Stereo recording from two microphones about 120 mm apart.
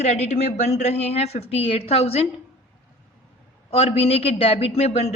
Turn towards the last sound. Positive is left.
turn(degrees=60)  # may be behind; listen again after turning